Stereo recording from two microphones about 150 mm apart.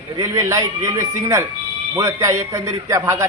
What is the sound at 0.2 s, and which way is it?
A man's voice, 20° right (ahead or behind).